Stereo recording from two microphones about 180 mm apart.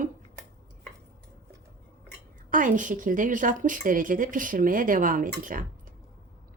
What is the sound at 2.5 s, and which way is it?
A woman's voice, 45° right (ahead or behind).